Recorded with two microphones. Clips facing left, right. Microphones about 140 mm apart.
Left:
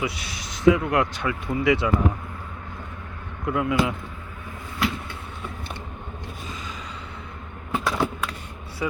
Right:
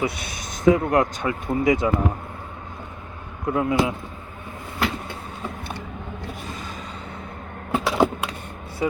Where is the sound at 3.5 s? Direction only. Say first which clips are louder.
Right 2 dB; 30° right (ahead or behind).